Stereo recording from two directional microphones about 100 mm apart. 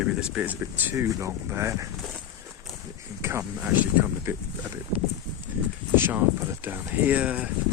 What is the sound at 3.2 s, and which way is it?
Speech, 25° right (ahead or behind).